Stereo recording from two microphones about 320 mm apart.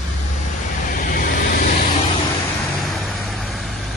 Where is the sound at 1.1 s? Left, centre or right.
Left.